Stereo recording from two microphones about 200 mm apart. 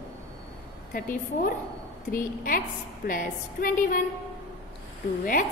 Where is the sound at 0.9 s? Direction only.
45° left (ahead or behind).